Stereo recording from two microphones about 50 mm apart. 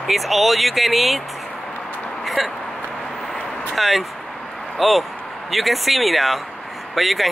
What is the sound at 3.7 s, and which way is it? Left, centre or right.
Speech, centre.